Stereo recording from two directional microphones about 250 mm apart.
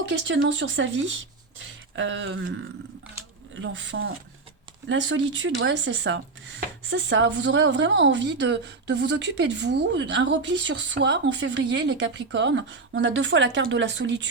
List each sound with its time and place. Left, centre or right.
0.1 s speech: right
3.5 s speech: right